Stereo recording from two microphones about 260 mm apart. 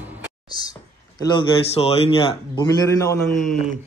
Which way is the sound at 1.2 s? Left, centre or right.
Centre.